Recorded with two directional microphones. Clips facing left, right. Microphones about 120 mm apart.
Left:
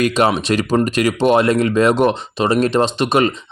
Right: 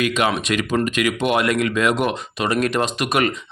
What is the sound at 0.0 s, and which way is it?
Speech, 35° left (ahead or behind).